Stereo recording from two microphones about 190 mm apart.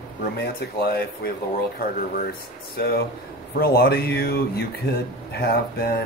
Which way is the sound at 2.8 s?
55° left (ahead or behind).